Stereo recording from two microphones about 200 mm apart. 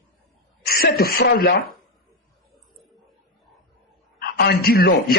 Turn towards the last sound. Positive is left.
turn(degrees=50)  # may be behind; listen again after turning